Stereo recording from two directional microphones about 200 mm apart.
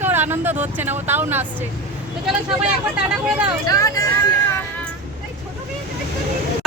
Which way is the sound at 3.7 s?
15° left (ahead or behind).